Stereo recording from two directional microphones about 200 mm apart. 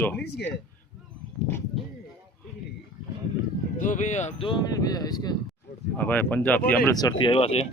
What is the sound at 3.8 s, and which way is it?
Speech, 40° left (ahead or behind).